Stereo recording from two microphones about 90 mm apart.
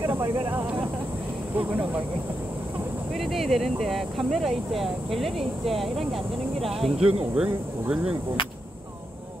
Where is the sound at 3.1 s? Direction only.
Centre (ahead or behind).